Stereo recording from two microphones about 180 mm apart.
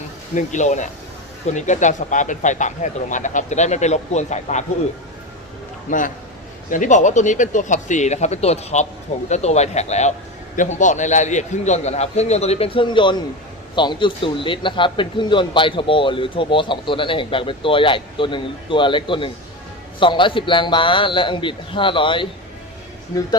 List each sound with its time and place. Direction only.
0.3 s speech: 40° left (ahead or behind)
5.9 s a man's voice: 45° left (ahead or behind); by 22.3 s 30° left (ahead or behind)